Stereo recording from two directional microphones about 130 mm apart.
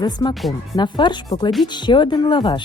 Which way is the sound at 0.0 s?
30° left (ahead or behind).